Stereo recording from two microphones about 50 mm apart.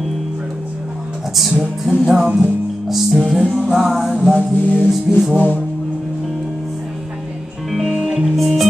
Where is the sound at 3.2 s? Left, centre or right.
Centre.